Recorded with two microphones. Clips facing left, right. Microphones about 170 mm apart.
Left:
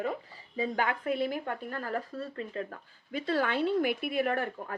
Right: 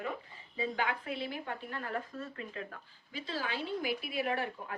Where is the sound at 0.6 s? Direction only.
45° left (ahead or behind).